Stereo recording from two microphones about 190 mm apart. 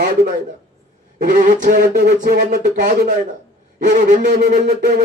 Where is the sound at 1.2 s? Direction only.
40° right (ahead or behind).